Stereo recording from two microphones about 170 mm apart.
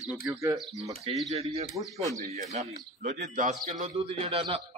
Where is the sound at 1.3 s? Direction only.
40° right (ahead or behind).